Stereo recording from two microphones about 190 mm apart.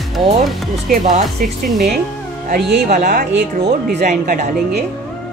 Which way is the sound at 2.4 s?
50° right (ahead or behind).